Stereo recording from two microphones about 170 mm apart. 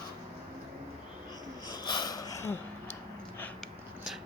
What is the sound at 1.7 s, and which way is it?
Snort, 25° left (ahead or behind).